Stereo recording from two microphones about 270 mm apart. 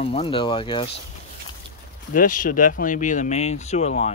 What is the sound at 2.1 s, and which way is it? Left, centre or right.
Speech, left.